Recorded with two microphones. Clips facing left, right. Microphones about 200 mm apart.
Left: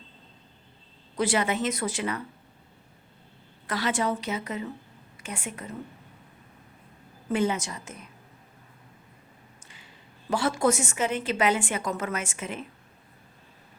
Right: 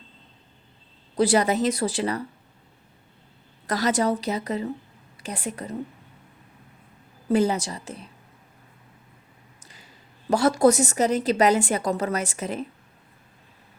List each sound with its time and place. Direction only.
1.1 s speech: 35° right (ahead or behind)
3.7 s speech: 40° right (ahead or behind)
7.3 s speech: 35° right (ahead or behind)
9.6 s a woman's voice: 40° right (ahead or behind)